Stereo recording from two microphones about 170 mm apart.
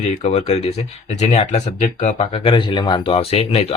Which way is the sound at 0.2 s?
35° left (ahead or behind).